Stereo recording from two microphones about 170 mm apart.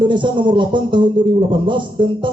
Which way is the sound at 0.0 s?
25° right (ahead or behind).